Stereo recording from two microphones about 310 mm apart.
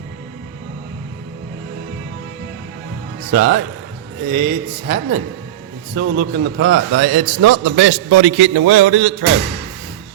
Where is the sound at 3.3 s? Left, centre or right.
Right.